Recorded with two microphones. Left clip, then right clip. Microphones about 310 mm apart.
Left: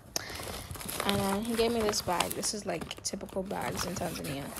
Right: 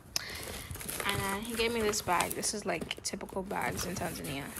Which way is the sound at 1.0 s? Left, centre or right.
Centre.